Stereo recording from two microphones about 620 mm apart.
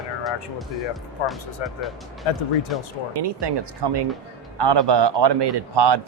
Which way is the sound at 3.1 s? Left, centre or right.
Right.